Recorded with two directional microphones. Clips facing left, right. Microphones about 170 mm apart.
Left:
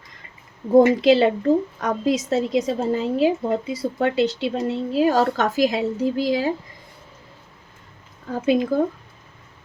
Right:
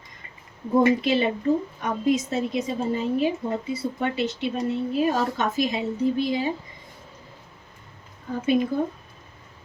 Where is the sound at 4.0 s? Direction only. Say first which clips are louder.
Left 9 dB; 90° left.